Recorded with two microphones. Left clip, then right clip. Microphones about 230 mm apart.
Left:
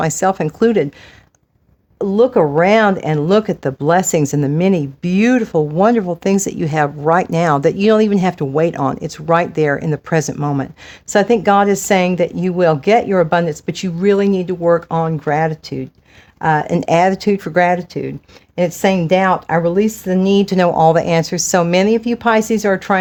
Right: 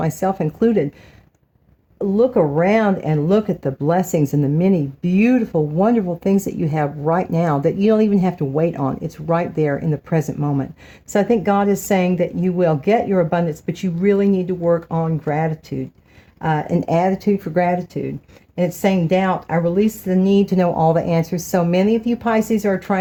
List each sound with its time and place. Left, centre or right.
0.1 s speech: left
2.0 s speech: left